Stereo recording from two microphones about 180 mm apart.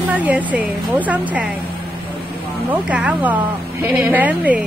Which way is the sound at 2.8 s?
5° right (ahead or behind).